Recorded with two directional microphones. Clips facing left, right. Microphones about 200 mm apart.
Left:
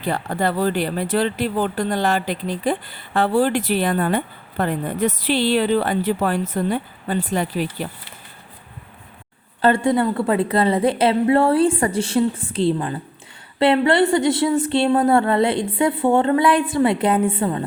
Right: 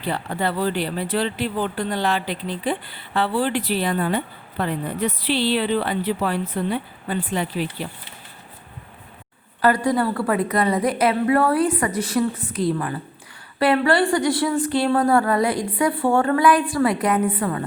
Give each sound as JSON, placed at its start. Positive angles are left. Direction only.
{"t": 0.0, "sound": "speech", "side_deg": 45}
{"t": 9.6, "sound": "a woman's voice", "side_deg": 25}